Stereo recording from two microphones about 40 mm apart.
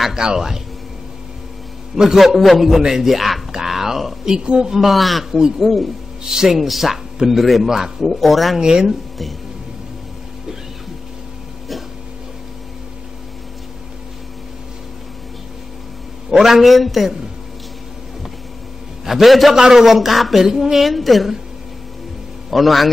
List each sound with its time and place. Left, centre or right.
0.1 s speech: centre
2.0 s speech: centre
2.2 s a man's voice: centre
3.5 s a sound: centre
4.4 s speech: right
4.6 s a man's voice: centre
5.3 s a man's voice: centre
8.5 s speech: centre
16.3 s a man's voice: centre
19.0 s a man's voice: centre
20.4 s speech: centre
20.9 s a man's voice: centre
22.5 s a man's voice: centre